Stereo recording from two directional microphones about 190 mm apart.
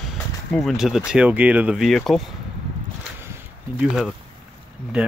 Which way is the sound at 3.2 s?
10° right (ahead or behind).